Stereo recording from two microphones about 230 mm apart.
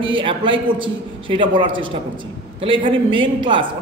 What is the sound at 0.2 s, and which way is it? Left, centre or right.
A man's voice, right.